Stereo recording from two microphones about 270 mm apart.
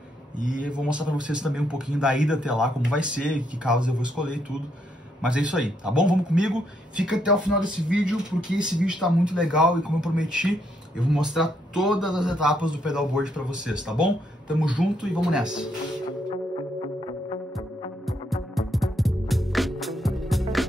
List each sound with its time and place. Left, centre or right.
0.6 s speech: centre
16.3 s music: centre
18.0 s music: centre